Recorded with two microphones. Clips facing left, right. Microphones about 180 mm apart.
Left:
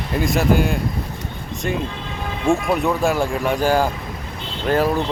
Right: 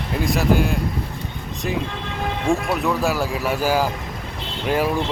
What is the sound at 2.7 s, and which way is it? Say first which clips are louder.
Speech: left 2 dB; centre (ahead or behind).